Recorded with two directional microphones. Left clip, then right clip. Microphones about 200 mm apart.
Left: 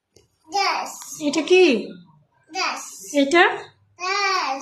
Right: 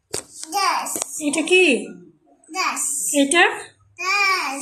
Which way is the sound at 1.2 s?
15° left (ahead or behind).